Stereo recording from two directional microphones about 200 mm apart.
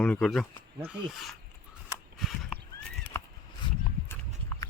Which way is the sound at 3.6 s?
25° left (ahead or behind).